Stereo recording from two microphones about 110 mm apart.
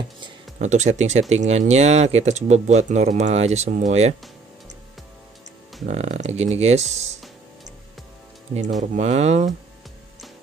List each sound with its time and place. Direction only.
0.6 s speech: 90° right
5.9 s speech: 80° right
9.0 s speech: 90° right